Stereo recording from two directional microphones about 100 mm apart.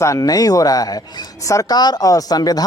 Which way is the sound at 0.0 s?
35° left (ahead or behind).